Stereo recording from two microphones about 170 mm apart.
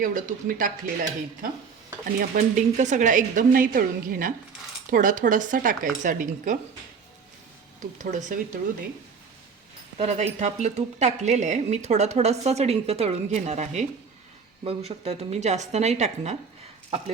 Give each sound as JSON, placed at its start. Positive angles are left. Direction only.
{"t": 0.0, "sound": "a woman's voice", "side_deg": -50}
{"t": 2.1, "sound": "a woman's voice", "side_deg": -50}
{"t": 7.9, "sound": "a woman's voice", "side_deg": -45}
{"t": 10.0, "sound": "speech", "side_deg": -45}
{"t": 16.9, "sound": "speech", "side_deg": -30}